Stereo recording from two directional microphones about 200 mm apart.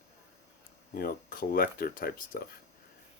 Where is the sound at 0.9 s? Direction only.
45° left (ahead or behind).